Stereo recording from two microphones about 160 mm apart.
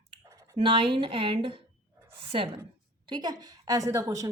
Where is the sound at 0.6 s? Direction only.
35° right (ahead or behind).